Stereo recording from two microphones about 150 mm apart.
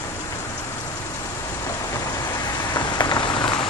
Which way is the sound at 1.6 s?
20° left (ahead or behind).